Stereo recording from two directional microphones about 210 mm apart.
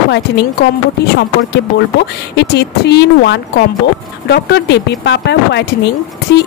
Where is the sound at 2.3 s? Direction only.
55° left (ahead or behind).